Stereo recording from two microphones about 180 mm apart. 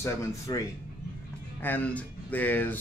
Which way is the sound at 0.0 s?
20° left (ahead or behind).